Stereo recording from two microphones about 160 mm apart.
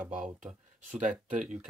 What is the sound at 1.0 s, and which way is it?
Speech, 50° right (ahead or behind).